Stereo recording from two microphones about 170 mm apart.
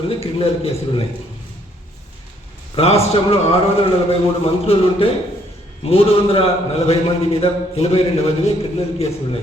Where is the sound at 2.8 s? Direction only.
35° left (ahead or behind).